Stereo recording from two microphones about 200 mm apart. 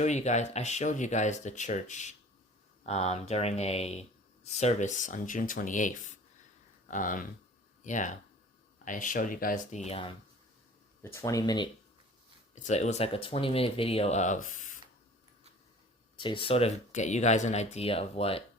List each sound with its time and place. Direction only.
0.0 s speech: 35° left (ahead or behind)
11.2 s speech: 20° left (ahead or behind)
12.5 s speech: 35° left (ahead or behind)
16.1 s speech: 25° left (ahead or behind)